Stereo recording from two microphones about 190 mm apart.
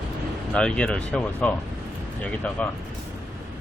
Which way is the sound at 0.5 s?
5° left (ahead or behind).